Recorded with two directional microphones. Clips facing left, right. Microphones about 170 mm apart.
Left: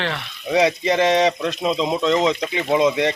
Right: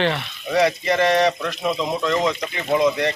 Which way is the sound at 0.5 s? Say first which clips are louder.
Left 1 dB; 20° left (ahead or behind).